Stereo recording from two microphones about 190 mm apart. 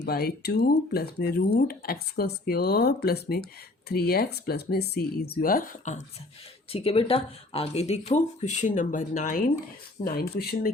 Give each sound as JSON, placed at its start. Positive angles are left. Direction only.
{"t": 0.0, "sound": "speech", "side_deg": 55}
{"t": 6.7, "sound": "speech", "side_deg": 30}